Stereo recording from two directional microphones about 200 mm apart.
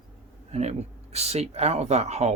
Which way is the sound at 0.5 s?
35° right (ahead or behind).